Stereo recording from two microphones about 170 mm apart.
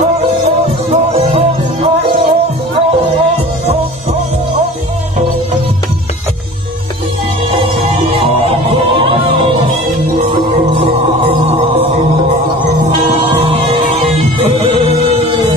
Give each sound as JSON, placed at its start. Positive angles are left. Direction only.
{"t": 0.9, "sound": "music", "side_deg": -40}
{"t": 8.6, "sound": "music", "side_deg": -35}
{"t": 13.2, "sound": "music", "side_deg": -30}